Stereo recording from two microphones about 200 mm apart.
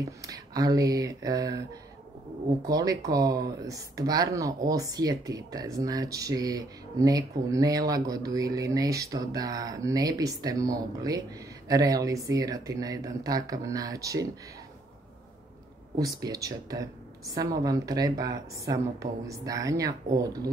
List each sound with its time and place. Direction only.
0.3 s speech: 15° right (ahead or behind)
2.6 s speech: 20° right (ahead or behind)
16.0 s speech: 20° right (ahead or behind)